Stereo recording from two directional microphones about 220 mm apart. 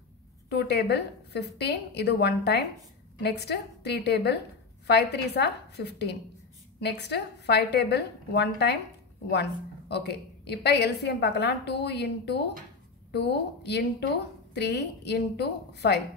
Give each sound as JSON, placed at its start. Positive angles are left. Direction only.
{"t": 0.5, "sound": "a woman's voice", "side_deg": 50}